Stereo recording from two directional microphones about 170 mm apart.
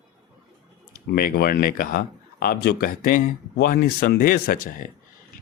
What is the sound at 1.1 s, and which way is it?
A man's voice, 65° left (ahead or behind).